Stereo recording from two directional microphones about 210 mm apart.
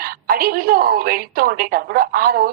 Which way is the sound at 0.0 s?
45° right (ahead or behind).